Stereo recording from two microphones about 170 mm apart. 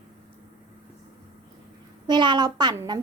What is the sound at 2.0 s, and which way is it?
Speech, 25° right (ahead or behind).